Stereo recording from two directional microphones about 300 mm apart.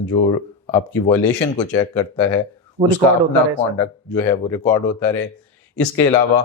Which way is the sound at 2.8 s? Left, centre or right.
Right.